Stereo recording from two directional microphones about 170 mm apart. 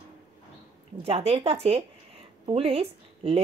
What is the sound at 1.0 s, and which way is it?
Speech, 35° right (ahead or behind).